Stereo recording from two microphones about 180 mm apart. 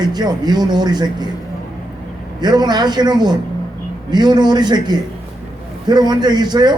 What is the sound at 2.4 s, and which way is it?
A man's voice, 25° right (ahead or behind).